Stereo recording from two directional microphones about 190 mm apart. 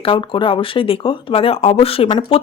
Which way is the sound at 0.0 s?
25° left (ahead or behind).